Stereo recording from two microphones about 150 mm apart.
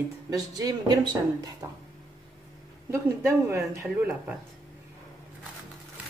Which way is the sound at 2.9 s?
20° right (ahead or behind).